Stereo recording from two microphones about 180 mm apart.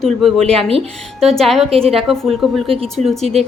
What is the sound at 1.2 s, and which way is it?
A woman's voice, centre (ahead or behind).